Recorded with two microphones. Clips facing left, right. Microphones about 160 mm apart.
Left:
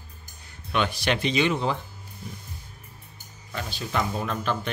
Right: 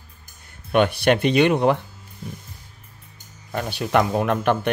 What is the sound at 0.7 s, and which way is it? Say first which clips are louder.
Speech: right 8 dB; 50° right (ahead or behind).